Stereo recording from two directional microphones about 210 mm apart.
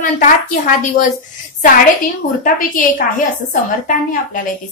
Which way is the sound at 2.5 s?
40° left (ahead or behind).